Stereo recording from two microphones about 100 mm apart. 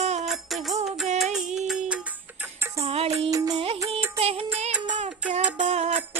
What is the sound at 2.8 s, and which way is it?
Music, 90° right.